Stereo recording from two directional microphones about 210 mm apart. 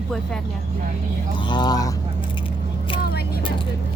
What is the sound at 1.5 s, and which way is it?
Speech, 20° left (ahead or behind).